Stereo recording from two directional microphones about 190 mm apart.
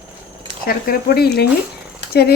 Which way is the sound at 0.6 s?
50° left (ahead or behind).